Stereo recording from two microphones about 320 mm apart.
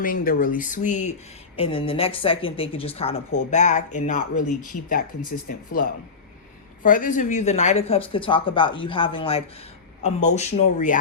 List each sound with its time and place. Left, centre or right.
0.0 s speech: left